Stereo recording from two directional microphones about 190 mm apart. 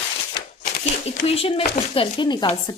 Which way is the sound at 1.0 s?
30° left (ahead or behind).